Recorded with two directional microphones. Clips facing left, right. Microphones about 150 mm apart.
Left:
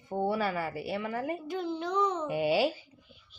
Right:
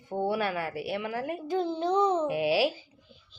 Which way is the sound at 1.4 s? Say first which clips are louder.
Right 5 dB; 30° right (ahead or behind).